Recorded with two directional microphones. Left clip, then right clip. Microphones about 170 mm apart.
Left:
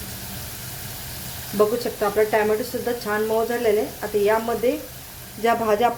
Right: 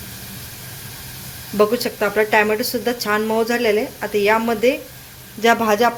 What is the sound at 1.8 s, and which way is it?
A woman's voice, 15° right (ahead or behind).